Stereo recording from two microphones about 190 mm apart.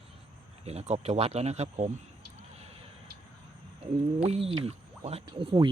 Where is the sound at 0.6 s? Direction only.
35° right (ahead or behind).